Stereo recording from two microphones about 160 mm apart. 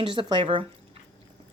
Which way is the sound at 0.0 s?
30° right (ahead or behind).